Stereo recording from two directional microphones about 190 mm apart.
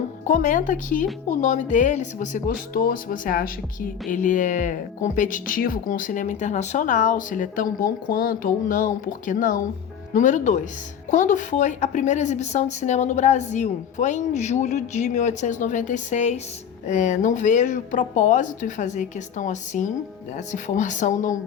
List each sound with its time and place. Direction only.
0.3 s a woman's voice: 45° left (ahead or behind)